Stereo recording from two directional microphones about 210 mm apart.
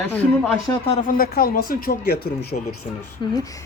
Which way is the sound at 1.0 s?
45° left (ahead or behind).